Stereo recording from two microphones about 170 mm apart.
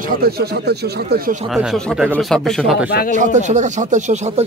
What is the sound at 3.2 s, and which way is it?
Speech, 45° right (ahead or behind).